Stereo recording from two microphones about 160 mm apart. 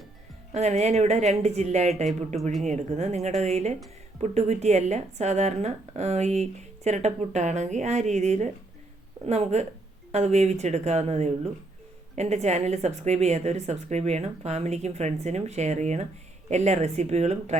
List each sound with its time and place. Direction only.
0.5 s speech: 45° right (ahead or behind)